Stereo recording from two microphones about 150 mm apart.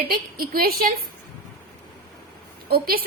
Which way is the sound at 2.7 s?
85° right.